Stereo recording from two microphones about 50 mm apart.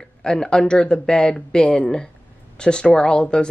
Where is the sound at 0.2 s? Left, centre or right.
Centre.